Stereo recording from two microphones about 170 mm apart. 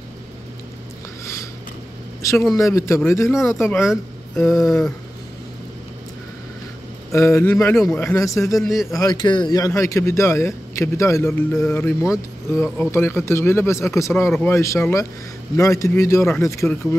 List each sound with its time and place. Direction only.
1.2 s a sound: 20° left (ahead or behind)
2.5 s a man's voice: 20° left (ahead or behind)
3.6 s a man's voice: centre (ahead or behind)
7.1 s a man's voice: 15° left (ahead or behind)
7.7 s a man's voice: centre (ahead or behind)
8.0 s a man's voice: 15° left (ahead or behind)
8.5 s a man's voice: centre (ahead or behind)
9.0 s a man's voice: 25° left (ahead or behind)